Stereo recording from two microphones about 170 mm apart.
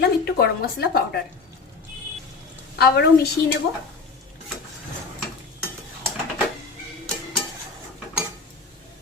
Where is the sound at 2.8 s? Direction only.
65° left (ahead or behind).